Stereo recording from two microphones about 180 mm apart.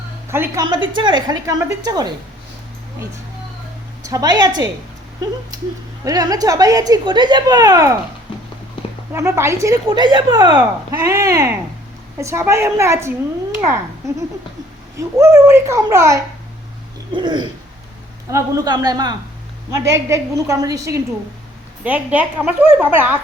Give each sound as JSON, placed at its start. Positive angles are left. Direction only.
{"t": 0.3, "sound": "a woman's voice", "side_deg": -15}
{"t": 0.9, "sound": "a woman's voice", "side_deg": -25}
{"t": 4.0, "sound": "a woman's voice", "side_deg": -20}
{"t": 6.1, "sound": "a woman's voice", "side_deg": -20}
{"t": 9.1, "sound": "a woman's voice", "side_deg": -15}